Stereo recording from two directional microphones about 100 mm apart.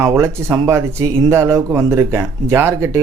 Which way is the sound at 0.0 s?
25° right (ahead or behind).